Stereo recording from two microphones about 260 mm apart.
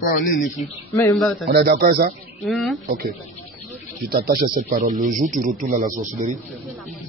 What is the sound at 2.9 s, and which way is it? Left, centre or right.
Speech, right.